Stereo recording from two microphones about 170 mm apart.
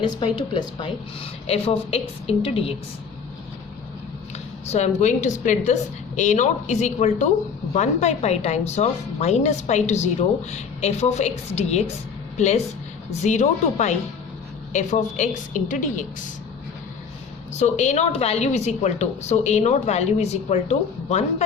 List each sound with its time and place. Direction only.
0.2 s speech: 25° left (ahead or behind)
4.6 s a woman's voice: 40° left (ahead or behind)
13.2 s a woman's voice: 45° left (ahead or behind)
17.5 s speech: 45° left (ahead or behind)